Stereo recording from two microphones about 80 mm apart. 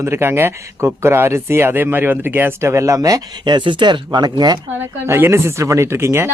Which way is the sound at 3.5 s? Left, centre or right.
Right.